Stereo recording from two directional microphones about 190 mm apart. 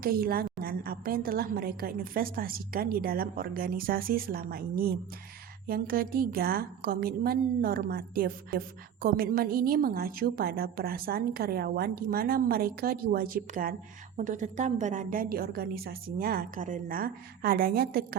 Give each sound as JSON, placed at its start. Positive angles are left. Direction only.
{"t": 0.0, "sound": "a woman's voice", "side_deg": -50}